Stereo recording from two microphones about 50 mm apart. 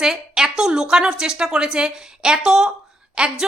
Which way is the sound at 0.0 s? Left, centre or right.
Centre.